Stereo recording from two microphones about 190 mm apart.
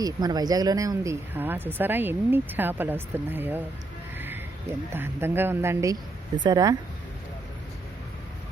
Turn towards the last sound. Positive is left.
turn(degrees=-20)  # may be behind; listen again after turning